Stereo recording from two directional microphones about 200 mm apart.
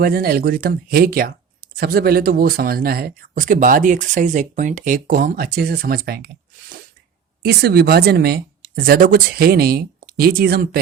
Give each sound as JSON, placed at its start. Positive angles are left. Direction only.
{"t": 0.0, "sound": "speech", "side_deg": -45}